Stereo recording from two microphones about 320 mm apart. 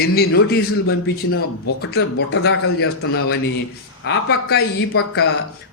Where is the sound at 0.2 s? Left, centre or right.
Left.